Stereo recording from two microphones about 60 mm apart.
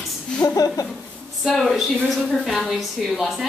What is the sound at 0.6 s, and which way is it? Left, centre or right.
Speech, left.